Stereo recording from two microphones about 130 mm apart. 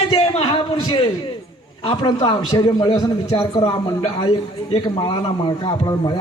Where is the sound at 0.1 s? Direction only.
45° left (ahead or behind).